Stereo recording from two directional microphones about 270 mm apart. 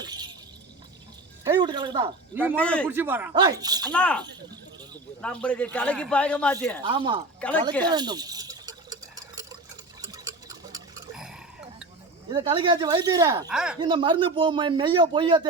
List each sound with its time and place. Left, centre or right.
0.0 s keys jangling: centre
1.5 s speech: centre
2.6 s a man's voice: centre
2.9 s speech: centre
3.9 s a man's voice: centre
5.2 s a man's voice: centre
6.8 s speech: centre
7.4 s a man's voice: centre
7.9 s a sound: centre
10.0 s clock: centre
11.1 s a sound: centre
12.3 s speech: centre
13.7 s speech: centre